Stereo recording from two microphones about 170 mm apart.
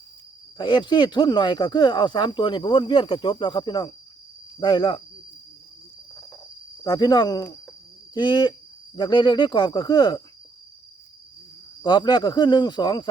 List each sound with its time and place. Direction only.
0.6 s speech: 25° left (ahead or behind)
6.8 s speech: 20° left (ahead or behind)
11.8 s speech: 25° left (ahead or behind)